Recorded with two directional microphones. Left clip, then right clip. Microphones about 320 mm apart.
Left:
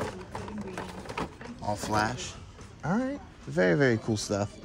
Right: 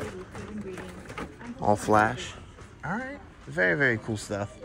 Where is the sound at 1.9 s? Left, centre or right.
Centre.